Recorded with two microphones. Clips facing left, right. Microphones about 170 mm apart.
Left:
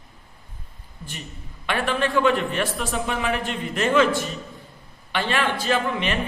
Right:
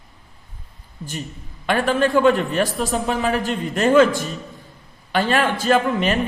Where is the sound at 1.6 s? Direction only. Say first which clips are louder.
Right 5 dB; 40° right (ahead or behind).